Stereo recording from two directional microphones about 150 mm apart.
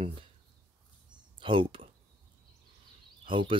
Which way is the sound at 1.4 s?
35° right (ahead or behind).